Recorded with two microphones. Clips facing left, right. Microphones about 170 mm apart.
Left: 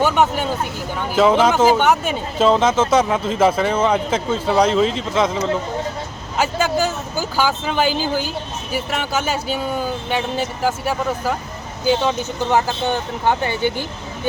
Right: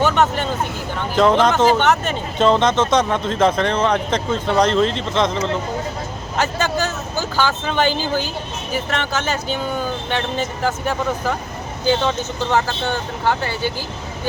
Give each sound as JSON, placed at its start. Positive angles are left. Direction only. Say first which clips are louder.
{"t": 0.0, "sound": "speech", "louder": "even", "side_deg": 10}